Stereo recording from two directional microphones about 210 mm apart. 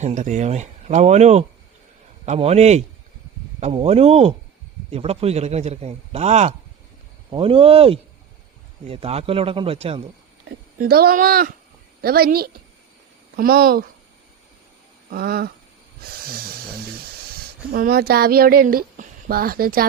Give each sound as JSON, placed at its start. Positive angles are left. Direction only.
{"t": 0.0, "sound": "a man's voice", "side_deg": -35}
{"t": 10.8, "sound": "speech", "side_deg": -45}
{"t": 15.1, "sound": "speech", "side_deg": -45}